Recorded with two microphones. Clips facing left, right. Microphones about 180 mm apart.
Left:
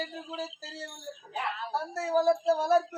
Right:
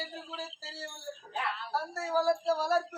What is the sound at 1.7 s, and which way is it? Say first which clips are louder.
A man's voice: left 4 dB; 20° left (ahead or behind).